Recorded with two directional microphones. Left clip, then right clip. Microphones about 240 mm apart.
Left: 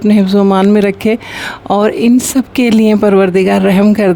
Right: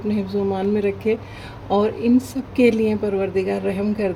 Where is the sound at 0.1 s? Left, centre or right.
Left.